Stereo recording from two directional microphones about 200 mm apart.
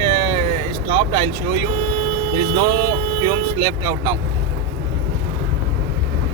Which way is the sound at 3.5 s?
15° right (ahead or behind).